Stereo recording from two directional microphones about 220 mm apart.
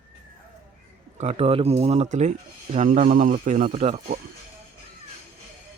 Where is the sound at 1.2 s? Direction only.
30° right (ahead or behind).